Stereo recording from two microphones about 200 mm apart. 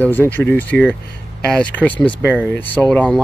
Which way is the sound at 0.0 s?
10° left (ahead or behind).